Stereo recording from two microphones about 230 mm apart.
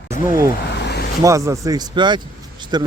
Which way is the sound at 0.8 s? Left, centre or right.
Left.